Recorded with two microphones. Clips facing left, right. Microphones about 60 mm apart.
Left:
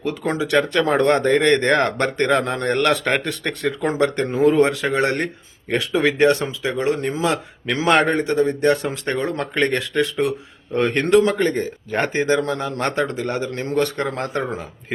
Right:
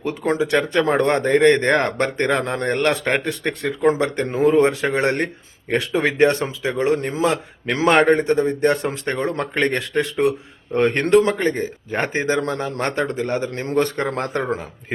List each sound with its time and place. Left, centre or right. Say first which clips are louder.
0.0 s speech: right 2 dB; right
12.4 s a man's voice: even; right
14.1 s a man's voice: right 1 dB; right